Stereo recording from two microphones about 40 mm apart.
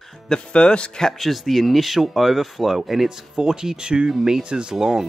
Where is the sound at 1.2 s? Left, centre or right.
Centre.